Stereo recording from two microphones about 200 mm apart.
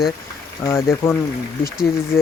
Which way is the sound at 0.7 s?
15° left (ahead or behind).